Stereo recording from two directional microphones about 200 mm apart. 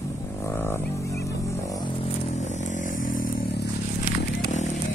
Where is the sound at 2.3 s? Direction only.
35° left (ahead or behind).